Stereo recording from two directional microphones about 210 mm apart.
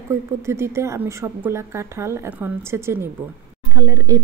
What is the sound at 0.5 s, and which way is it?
Speech, 10° right (ahead or behind).